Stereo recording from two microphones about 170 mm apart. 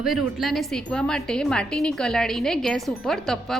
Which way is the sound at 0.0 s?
Centre (ahead or behind).